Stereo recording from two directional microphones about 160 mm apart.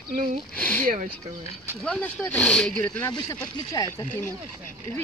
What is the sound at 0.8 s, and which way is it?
Speech, 55° right (ahead or behind).